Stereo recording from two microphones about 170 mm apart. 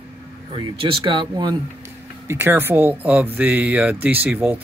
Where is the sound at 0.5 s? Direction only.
30° right (ahead or behind).